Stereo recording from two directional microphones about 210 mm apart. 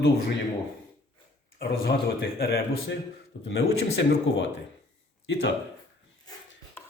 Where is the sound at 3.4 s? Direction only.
60° left (ahead or behind).